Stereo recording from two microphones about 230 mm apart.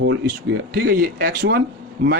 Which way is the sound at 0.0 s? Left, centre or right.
Right.